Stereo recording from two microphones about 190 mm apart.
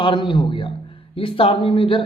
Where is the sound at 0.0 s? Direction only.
25° left (ahead or behind).